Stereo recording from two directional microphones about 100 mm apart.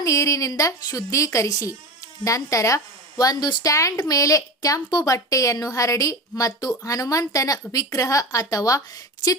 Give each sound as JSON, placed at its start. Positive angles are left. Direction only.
{"t": 0.0, "sound": "a woman's voice", "side_deg": 35}